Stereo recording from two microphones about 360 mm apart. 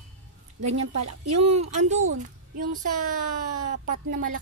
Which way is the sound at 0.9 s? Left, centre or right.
Right.